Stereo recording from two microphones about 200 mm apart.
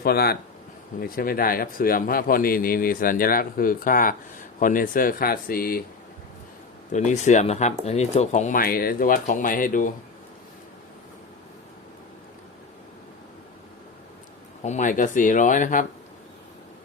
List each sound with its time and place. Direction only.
0.0 s a man's voice: 50° left (ahead or behind)
6.9 s speech: 35° left (ahead or behind)
14.6 s speech: 35° left (ahead or behind)